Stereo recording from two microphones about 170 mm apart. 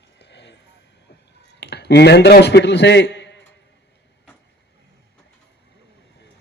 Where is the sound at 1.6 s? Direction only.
80° left.